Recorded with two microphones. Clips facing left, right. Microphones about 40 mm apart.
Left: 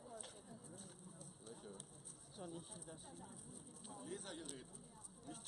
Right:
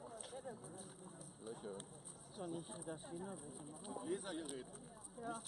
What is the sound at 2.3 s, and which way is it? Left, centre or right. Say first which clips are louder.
Speech: right 5 dB; centre.